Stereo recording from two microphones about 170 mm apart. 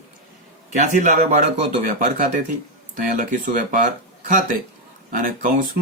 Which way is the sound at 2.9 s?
50° right (ahead or behind).